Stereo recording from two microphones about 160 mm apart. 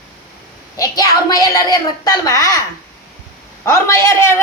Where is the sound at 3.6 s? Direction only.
15° left (ahead or behind).